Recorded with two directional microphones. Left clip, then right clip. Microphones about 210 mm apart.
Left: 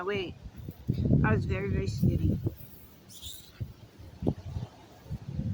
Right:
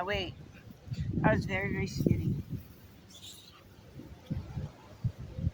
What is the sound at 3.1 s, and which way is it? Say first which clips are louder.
Mouse: left 4 dB; 25° left (ahead or behind).